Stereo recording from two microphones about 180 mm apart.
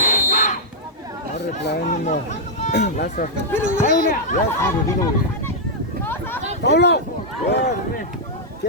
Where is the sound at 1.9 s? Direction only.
40° left (ahead or behind).